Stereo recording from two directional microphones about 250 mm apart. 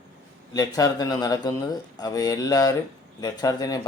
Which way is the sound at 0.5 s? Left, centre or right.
Centre.